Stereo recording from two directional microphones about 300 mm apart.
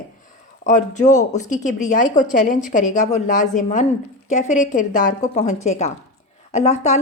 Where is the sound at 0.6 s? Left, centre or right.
Left.